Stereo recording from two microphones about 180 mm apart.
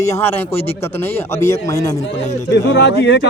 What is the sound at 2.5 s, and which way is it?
Speech, 75° left (ahead or behind).